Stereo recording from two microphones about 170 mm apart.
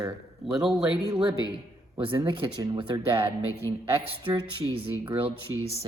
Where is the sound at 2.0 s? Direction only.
25° right (ahead or behind).